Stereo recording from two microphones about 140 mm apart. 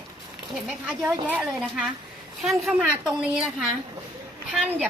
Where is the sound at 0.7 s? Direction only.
10° right (ahead or behind).